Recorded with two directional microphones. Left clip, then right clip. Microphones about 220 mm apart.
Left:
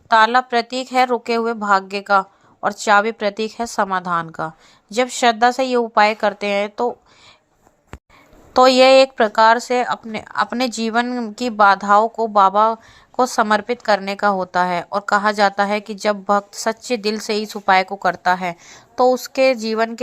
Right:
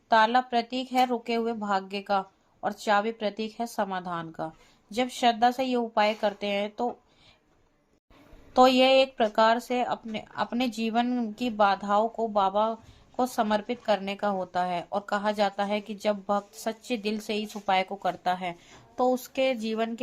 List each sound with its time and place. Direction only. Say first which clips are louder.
0.1 s speech: left 8 dB; 20° left (ahead or behind)
8.5 s speech: left 9 dB; 20° left (ahead or behind)